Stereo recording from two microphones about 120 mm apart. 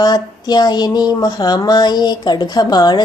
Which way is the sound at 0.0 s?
35° left (ahead or behind).